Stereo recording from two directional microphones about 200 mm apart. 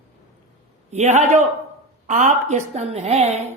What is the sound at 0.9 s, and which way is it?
A woman's voice, 35° right (ahead or behind).